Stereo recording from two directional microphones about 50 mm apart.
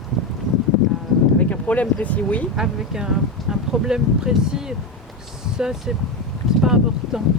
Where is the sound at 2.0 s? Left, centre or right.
Left.